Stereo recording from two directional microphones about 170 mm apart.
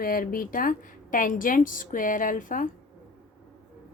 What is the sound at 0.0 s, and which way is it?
A woman's voice, 55° left (ahead or behind).